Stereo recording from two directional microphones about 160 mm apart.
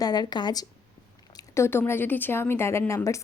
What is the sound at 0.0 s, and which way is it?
Speech, 25° left (ahead or behind).